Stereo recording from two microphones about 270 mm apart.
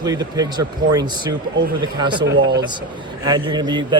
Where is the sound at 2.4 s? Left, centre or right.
Right.